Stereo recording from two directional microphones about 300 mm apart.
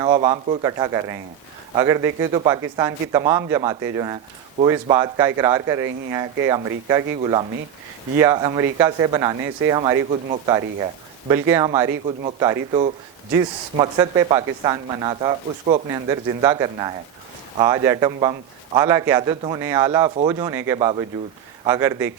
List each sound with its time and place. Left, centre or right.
0.0 s speech: centre